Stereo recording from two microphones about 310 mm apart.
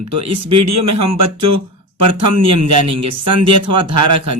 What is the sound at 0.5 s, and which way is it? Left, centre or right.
Speech, right.